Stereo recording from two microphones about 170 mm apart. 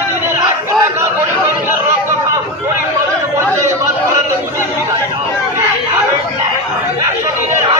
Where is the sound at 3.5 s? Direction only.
15° right (ahead or behind).